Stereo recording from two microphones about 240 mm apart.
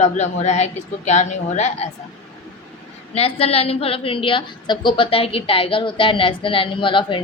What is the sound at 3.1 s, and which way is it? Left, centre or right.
A woman's voice, left.